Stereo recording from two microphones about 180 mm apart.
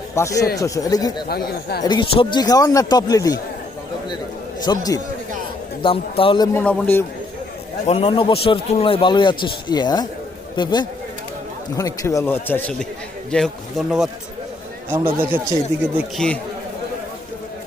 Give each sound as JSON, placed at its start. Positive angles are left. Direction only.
{"t": 0.2, "sound": "a man's voice", "side_deg": 15}
{"t": 1.3, "sound": "speech", "side_deg": 60}
{"t": 1.8, "sound": "a man's voice", "side_deg": 25}
{"t": 4.6, "sound": "a man's voice", "side_deg": 20}
{"t": 6.5, "sound": "speech", "side_deg": 10}
{"t": 7.9, "sound": "a man's voice", "side_deg": 30}
{"t": 16.1, "sound": "speech", "side_deg": 5}